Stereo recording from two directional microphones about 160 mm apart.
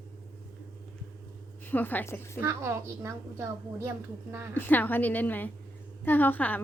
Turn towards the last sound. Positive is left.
turn(degrees=10)  # may be behind; listen again after turning